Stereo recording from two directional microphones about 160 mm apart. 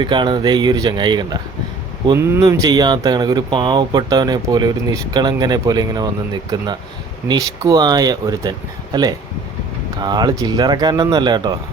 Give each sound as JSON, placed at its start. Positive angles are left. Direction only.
{"t": 0.0, "sound": "speech", "side_deg": -30}
{"t": 2.4, "sound": "speech", "side_deg": -25}